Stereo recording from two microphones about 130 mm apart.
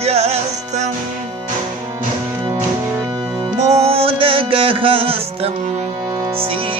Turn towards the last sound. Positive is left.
turn(degrees=-45)  # may be behind; listen again after turning